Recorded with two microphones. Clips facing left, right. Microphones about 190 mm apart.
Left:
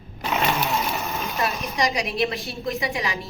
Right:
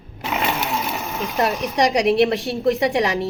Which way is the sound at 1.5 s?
15° right (ahead or behind).